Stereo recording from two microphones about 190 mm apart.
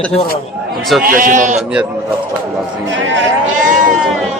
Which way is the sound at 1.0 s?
45° right (ahead or behind).